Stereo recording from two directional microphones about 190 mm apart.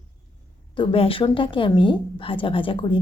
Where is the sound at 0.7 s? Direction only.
25° left (ahead or behind).